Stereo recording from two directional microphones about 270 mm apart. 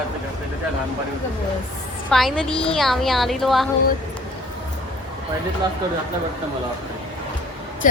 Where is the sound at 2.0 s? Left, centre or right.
Centre.